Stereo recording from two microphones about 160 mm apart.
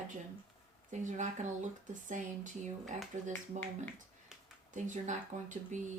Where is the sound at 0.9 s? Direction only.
50° right (ahead or behind).